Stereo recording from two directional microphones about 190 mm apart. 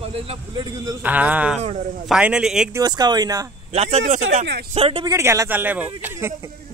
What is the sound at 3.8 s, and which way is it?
Speech, 35° right (ahead or behind).